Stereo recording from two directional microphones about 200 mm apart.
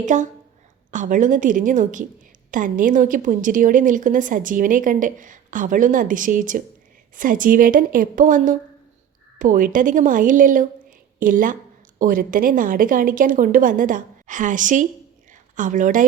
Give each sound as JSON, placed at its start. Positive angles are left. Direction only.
{"t": 0.0, "sound": "a woman's voice", "side_deg": -40}